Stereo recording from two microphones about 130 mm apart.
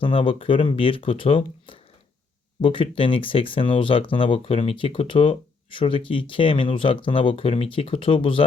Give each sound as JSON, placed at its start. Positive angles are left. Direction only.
{"t": 0.0, "sound": "speech", "side_deg": 45}